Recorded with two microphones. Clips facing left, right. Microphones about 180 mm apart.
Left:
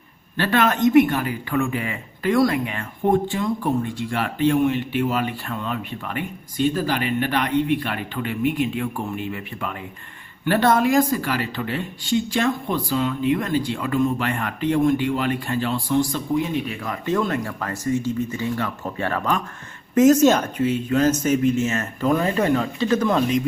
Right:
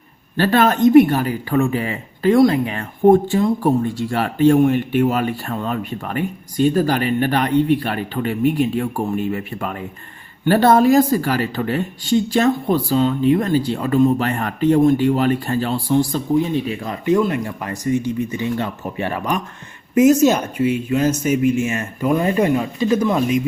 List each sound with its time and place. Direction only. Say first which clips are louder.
0.3 s speech: right 4 dB; 40° right (ahead or behind)
10.4 s speech: right 5 dB; 35° right (ahead or behind)
17.1 s speech: right 6 dB; 15° right (ahead or behind)